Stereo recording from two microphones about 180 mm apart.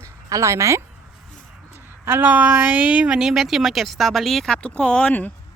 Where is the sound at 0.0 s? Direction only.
15° right (ahead or behind).